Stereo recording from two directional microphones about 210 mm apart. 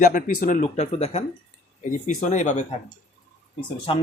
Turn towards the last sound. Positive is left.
turn(degrees=25)  # may be behind; listen again after turning